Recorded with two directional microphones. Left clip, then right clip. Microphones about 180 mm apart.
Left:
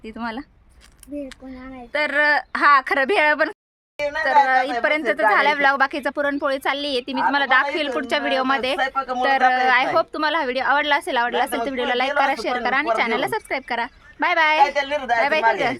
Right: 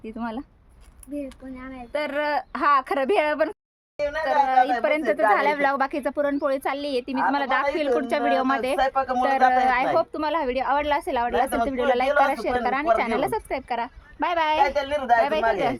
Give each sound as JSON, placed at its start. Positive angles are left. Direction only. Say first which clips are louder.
{"t": 0.2, "sound": "a woman's voice", "louder": "left 3 dB", "side_deg": 0}
{"t": 1.9, "sound": "a woman's voice", "louder": "left 7 dB", "side_deg": 0}
{"t": 8.8, "sound": "speech", "louder": "even", "side_deg": -70}
{"t": 9.5, "sound": "a woman's voice", "louder": "left 2 dB", "side_deg": -5}
{"t": 14.6, "sound": "a woman's voice", "louder": "left 3 dB", "side_deg": -65}
{"t": 15.2, "sound": "speech", "louder": "left 3 dB", "side_deg": 10}